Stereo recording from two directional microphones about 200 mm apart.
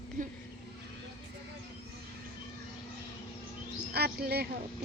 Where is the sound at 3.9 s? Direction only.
50° right (ahead or behind).